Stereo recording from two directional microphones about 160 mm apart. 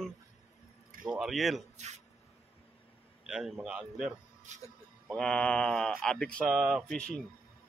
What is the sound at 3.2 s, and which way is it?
Speech, 5° right (ahead or behind).